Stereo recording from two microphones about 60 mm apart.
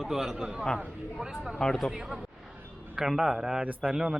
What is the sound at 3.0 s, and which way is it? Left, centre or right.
A man's voice, centre.